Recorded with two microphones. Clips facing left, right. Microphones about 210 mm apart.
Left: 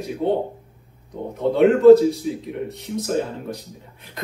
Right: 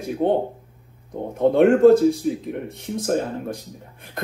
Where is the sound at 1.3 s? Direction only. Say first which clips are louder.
Right 1 dB; 50° right (ahead or behind).